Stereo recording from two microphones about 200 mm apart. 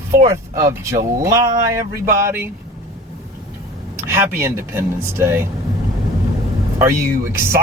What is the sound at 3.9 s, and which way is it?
Speech, 15° right (ahead or behind).